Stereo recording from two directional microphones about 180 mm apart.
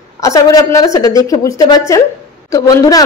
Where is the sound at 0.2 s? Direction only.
20° left (ahead or behind).